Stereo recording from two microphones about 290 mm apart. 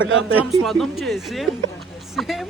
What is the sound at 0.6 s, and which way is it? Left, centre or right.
Speech, centre.